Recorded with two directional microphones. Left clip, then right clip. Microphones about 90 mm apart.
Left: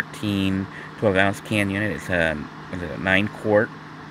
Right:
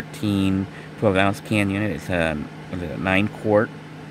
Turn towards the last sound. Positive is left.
turn(degrees=-10)  # may be behind; listen again after turning